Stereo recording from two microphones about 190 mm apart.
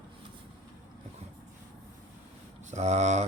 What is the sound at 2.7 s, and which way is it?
Speech, 35° right (ahead or behind).